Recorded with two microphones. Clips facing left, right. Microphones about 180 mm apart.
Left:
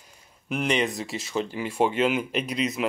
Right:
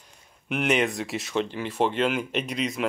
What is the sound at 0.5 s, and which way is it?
Speech, centre (ahead or behind).